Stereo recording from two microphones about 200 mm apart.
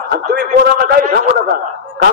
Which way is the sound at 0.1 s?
50° right (ahead or behind).